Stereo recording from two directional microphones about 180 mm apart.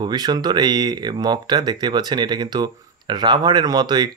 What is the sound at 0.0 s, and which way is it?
Speech, 25° right (ahead or behind).